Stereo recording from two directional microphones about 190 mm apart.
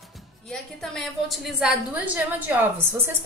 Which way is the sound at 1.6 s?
5° right (ahead or behind).